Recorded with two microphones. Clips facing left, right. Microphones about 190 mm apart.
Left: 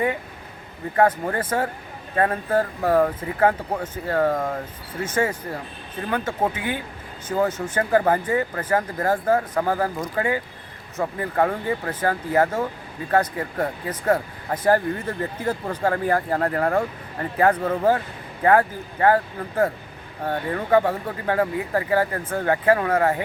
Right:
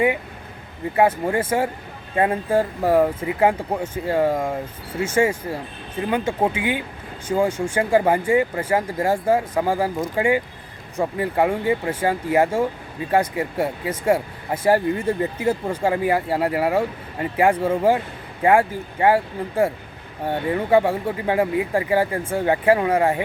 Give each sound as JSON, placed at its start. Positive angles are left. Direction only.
{"t": 0.9, "sound": "speech", "side_deg": -10}